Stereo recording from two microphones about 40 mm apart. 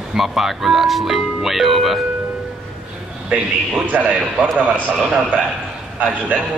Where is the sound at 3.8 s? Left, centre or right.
Right.